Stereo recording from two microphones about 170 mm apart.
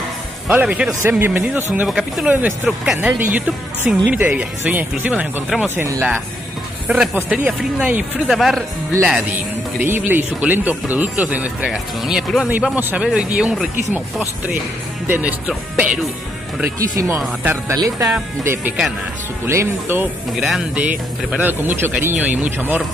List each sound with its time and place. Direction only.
0.5 s speech: 5° right (ahead or behind)
6.9 s speech: 5° right (ahead or behind)
9.8 s speech: 10° right (ahead or behind)
15.0 s speech: 10° right (ahead or behind)